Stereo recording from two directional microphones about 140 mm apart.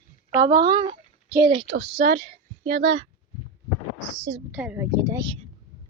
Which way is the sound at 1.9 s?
85° right.